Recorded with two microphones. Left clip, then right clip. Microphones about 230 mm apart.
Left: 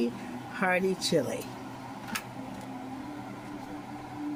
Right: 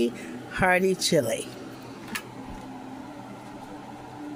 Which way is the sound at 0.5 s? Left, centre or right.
Right.